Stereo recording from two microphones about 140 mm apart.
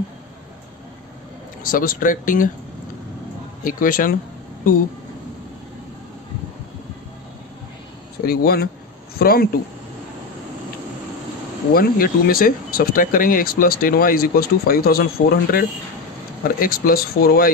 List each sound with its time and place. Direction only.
1.6 s speech: 85° left
3.6 s speech: 80° left
8.3 s speech: 90° left
11.7 s speech: 90° left